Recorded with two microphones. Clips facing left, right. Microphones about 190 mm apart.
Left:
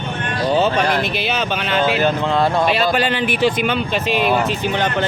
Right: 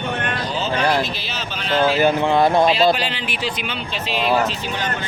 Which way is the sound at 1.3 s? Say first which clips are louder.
Left 4 dB; 65° left (ahead or behind).